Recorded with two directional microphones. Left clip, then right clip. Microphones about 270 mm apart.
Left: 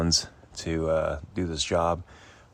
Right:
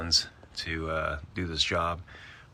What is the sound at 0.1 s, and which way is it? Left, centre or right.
Speech, left.